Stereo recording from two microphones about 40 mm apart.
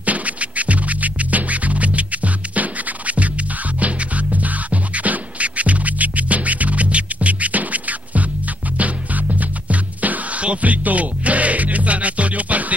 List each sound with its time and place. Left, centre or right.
0.0 s music: right